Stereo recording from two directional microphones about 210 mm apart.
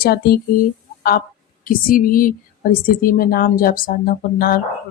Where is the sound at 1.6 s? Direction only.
45° left (ahead or behind).